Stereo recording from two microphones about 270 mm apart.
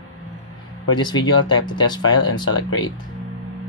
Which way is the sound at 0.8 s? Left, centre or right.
Centre.